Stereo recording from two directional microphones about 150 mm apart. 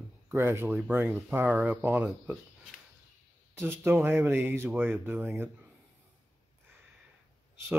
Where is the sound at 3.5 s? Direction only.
15° right (ahead or behind).